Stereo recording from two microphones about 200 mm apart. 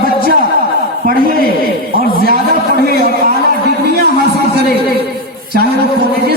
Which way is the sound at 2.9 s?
50° left (ahead or behind).